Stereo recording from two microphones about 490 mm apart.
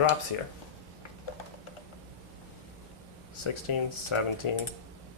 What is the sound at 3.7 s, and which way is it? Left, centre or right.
Speech, left.